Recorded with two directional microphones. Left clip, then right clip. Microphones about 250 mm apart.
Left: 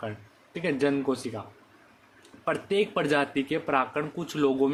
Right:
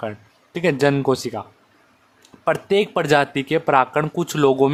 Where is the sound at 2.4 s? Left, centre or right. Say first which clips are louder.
Right 8 dB; right.